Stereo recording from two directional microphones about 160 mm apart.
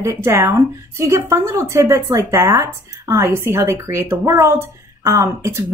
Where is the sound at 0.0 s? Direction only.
15° right (ahead or behind).